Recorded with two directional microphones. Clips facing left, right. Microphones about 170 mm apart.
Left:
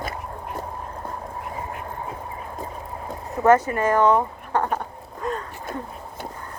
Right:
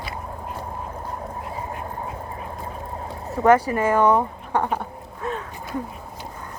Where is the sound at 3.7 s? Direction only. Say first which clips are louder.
Even; 10° right (ahead or behind).